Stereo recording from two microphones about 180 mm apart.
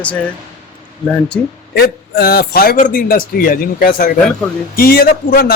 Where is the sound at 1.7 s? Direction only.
60° left (ahead or behind).